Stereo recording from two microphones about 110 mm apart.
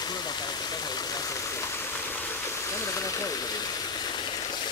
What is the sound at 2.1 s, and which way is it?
Stream, 25° left (ahead or behind).